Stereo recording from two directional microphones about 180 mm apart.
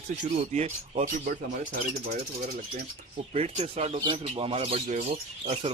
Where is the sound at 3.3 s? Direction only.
40° right (ahead or behind).